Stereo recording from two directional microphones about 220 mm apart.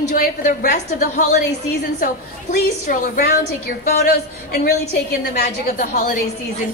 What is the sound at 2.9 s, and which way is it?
A woman's voice, 40° left (ahead or behind).